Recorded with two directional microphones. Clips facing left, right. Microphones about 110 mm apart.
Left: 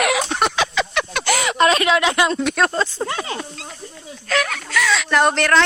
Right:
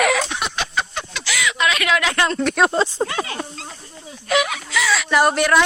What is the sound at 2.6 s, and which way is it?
Speech, 15° right (ahead or behind).